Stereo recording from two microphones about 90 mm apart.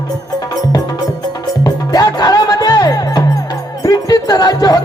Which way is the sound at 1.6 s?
45° left (ahead or behind).